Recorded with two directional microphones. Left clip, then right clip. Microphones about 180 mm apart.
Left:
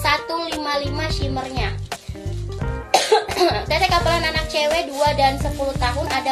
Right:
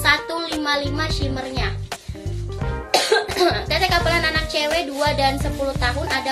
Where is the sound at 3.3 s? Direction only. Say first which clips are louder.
Left 1 dB; 20° right (ahead or behind).